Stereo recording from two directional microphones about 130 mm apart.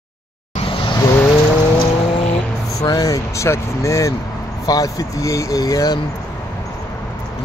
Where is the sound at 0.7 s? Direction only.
40° left (ahead or behind).